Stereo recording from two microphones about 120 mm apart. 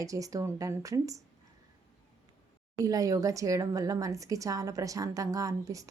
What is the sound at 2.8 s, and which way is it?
A woman's voice, 30° right (ahead or behind).